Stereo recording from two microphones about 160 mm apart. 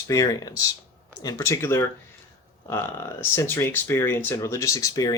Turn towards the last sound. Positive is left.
turn(degrees=20)  # may be behind; listen again after turning